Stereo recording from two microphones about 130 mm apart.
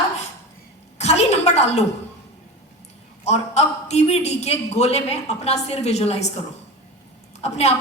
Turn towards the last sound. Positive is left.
turn(degrees=55)  # may be behind; listen again after turning